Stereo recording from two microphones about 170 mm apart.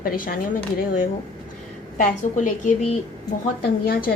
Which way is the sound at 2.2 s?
45° left (ahead or behind).